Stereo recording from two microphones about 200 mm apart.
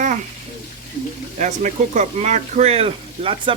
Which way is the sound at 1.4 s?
35° right (ahead or behind).